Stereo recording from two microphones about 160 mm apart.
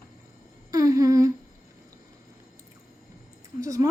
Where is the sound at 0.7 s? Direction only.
20° right (ahead or behind).